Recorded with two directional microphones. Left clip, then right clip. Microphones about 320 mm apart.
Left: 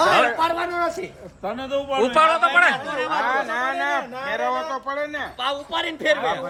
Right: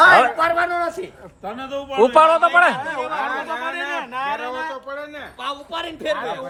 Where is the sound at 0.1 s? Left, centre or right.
Centre.